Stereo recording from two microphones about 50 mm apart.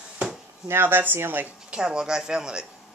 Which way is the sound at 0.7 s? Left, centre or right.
Right.